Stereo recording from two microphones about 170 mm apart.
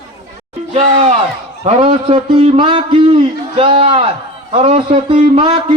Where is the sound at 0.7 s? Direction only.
40° right (ahead or behind).